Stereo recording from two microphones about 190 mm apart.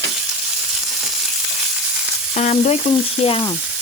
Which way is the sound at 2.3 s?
35° left (ahead or behind).